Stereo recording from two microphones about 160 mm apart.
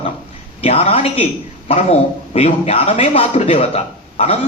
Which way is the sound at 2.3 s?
40° left (ahead or behind).